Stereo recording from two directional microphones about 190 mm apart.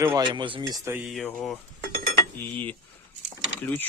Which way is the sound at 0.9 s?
5° right (ahead or behind).